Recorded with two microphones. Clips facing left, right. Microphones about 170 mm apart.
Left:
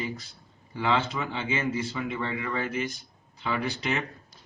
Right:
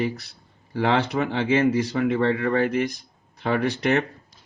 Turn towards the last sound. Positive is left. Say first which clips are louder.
# right 8 dB
turn(degrees=-75)  # may be behind; listen again after turning